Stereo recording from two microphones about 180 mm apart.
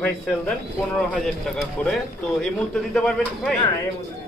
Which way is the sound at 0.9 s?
5° left (ahead or behind).